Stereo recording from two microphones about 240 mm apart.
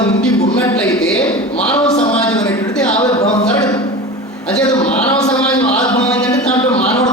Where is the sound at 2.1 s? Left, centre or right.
Centre.